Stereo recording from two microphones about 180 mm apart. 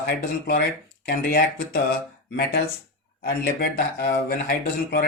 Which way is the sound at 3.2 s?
60° left (ahead or behind).